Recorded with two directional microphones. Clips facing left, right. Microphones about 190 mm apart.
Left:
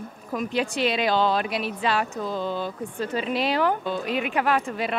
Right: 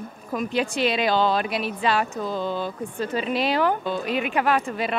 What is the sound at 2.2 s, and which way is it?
Speech, 25° right (ahead or behind).